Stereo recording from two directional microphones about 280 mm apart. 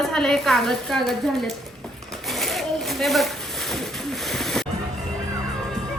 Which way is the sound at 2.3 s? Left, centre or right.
Centre.